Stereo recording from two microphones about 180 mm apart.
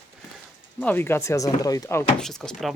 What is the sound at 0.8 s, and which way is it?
Speech, 10° left (ahead or behind).